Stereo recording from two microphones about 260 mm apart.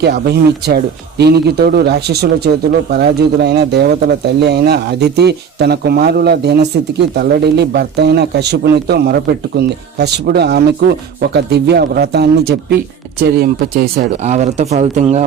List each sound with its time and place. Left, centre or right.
0.0 s speech: right
14.3 s speech: right